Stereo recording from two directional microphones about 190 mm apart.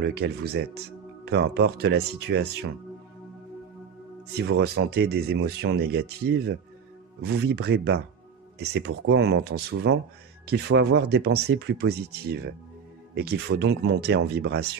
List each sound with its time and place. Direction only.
0.0 s speech: 60° right (ahead or behind)
4.5 s speech: 60° right (ahead or behind)
13.1 s speech: 60° right (ahead or behind)